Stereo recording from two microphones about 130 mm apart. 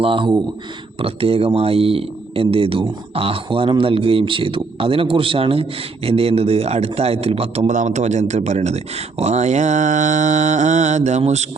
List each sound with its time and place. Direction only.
0.0 s speech: 45° right (ahead or behind)
7.7 s speech: 70° right (ahead or behind)